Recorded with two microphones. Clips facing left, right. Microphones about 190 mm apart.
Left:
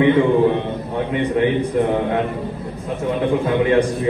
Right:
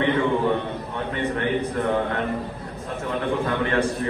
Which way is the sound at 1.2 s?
15° left (ahead or behind).